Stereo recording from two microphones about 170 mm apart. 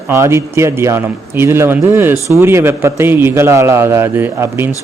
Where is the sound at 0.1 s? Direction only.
15° right (ahead or behind).